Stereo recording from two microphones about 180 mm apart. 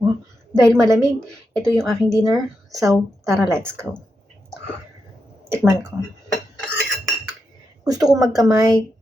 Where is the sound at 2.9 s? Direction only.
Centre (ahead or behind).